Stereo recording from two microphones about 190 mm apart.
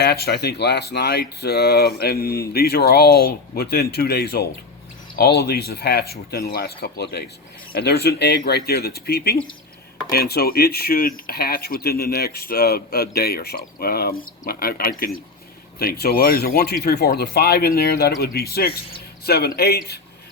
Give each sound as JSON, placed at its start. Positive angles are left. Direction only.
{"t": 0.0, "sound": "a man's voice", "side_deg": 55}